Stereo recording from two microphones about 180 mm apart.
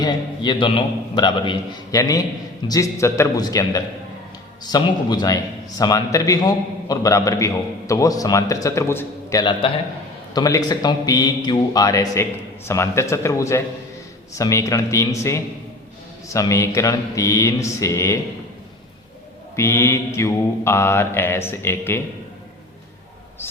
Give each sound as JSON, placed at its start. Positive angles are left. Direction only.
{"t": 0.0, "sound": "a man's voice", "side_deg": 25}
{"t": 9.4, "sound": "a man's voice", "side_deg": 30}
{"t": 14.3, "sound": "mantra", "side_deg": 15}
{"t": 19.5, "sound": "mantra", "side_deg": 15}